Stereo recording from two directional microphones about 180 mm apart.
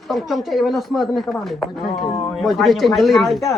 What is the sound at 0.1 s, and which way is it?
Speech, centre (ahead or behind).